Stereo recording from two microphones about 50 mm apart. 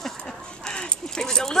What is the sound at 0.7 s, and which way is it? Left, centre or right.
Keys jangling, centre.